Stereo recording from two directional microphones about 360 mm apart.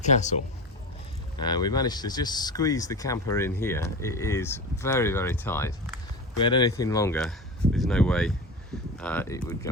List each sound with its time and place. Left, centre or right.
0.0 s speech: centre
1.4 s speech: centre